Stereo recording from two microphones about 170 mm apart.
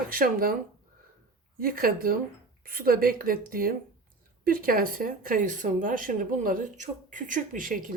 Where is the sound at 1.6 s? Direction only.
60° right (ahead or behind).